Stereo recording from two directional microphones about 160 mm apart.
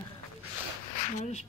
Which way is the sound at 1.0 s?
45° left (ahead or behind).